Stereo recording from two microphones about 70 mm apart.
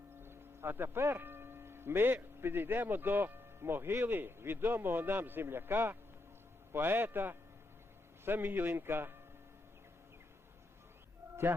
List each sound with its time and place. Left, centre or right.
0.2 s a man's voice: right